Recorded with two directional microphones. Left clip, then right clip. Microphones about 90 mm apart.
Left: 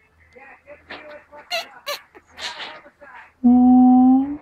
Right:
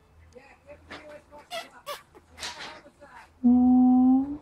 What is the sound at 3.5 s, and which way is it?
Humming, 20° left (ahead or behind).